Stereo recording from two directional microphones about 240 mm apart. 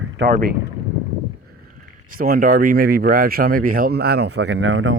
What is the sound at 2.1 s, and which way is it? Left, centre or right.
Speech, right.